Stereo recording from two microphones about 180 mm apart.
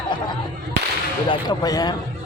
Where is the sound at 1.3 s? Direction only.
20° left (ahead or behind).